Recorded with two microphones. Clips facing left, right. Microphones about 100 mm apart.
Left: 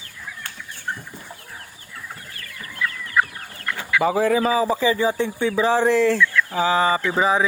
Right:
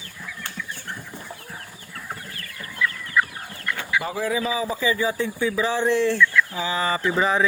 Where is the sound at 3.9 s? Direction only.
80° left.